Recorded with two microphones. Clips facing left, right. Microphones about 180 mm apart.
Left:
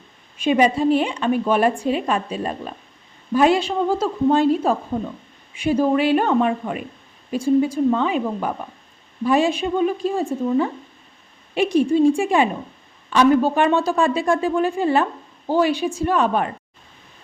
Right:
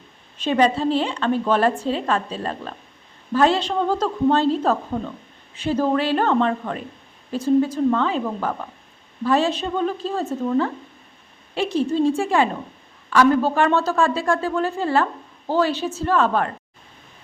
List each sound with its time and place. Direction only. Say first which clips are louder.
0.3 s a woman's voice: left 2 dB; 10° left (ahead or behind)